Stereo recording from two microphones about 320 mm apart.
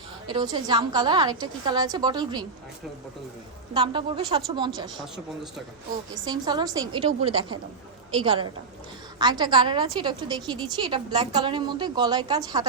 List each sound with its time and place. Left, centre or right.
0.3 s a woman's voice: centre
3.8 s a woman's voice: centre
5.1 s speech: centre
6.2 s a woman's voice: centre